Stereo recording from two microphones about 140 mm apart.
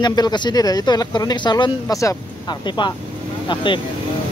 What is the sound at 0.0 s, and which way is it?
Speech, 30° left (ahead or behind).